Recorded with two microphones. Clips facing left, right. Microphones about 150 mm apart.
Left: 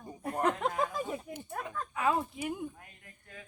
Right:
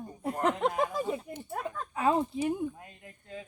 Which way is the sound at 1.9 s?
30° right (ahead or behind).